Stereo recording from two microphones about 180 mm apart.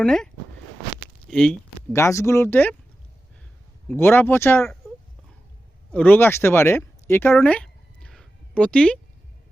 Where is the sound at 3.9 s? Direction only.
10° left (ahead or behind).